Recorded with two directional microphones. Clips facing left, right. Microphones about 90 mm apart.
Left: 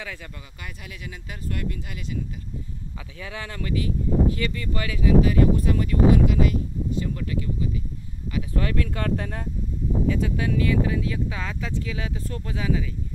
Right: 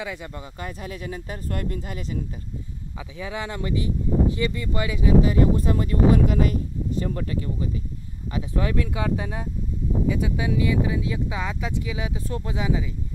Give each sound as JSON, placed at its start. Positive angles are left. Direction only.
{"t": 0.0, "sound": "speech", "side_deg": -15}
{"t": 0.3, "sound": "speech", "side_deg": -30}
{"t": 3.0, "sound": "speech", "side_deg": -15}
{"t": 6.1, "sound": "speech", "side_deg": -40}
{"t": 8.5, "sound": "speech", "side_deg": -15}